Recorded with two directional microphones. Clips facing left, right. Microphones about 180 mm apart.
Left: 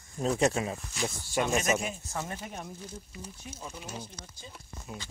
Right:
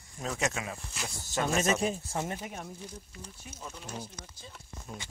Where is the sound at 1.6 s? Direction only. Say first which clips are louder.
Right 2 dB; 35° right (ahead or behind).